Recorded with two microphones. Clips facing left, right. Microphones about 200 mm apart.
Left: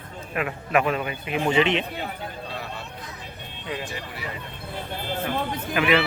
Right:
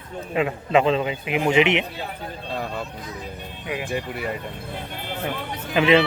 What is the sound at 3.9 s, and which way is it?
Speech, 55° right (ahead or behind).